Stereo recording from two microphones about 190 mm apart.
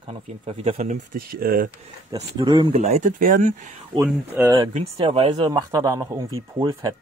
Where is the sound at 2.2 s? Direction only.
25° right (ahead or behind).